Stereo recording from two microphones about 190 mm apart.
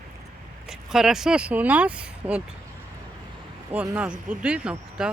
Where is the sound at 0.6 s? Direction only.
5° right (ahead or behind).